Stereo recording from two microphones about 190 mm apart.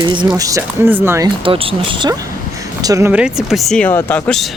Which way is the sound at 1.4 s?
30° right (ahead or behind).